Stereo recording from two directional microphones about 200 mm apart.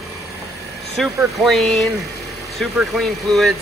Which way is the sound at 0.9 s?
Centre (ahead or behind).